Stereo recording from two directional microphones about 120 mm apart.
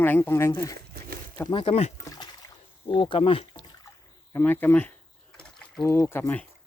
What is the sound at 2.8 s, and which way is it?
Speech, 45° left (ahead or behind).